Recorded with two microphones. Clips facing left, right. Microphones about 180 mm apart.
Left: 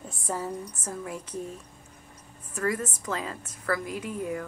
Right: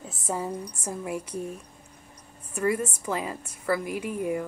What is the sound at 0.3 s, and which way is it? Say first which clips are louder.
A woman's voice: right 2 dB; 5° right (ahead or behind).